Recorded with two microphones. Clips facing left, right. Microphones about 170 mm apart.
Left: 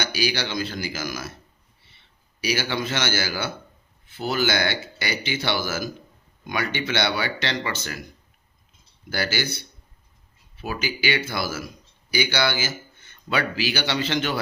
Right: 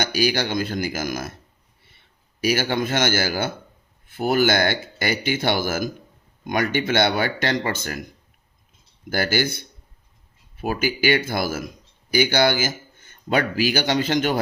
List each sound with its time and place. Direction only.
0.0 s speech: 45° right (ahead or behind)
9.0 s speech: 50° right (ahead or behind)